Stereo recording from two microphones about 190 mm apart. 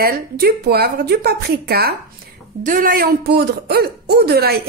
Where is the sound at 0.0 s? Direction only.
55° right (ahead or behind).